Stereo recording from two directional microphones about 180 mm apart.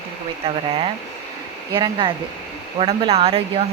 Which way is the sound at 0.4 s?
30° right (ahead or behind).